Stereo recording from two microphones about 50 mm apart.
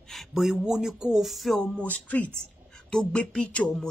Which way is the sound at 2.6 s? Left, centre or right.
Centre.